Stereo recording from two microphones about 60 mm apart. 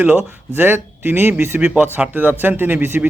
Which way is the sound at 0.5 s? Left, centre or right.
Right.